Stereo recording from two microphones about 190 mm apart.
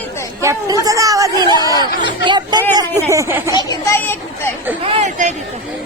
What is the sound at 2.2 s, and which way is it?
A woman's voice, 25° right (ahead or behind).